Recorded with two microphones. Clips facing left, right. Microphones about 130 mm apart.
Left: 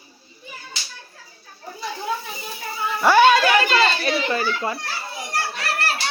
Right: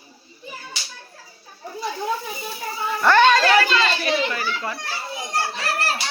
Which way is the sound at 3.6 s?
35° left (ahead or behind).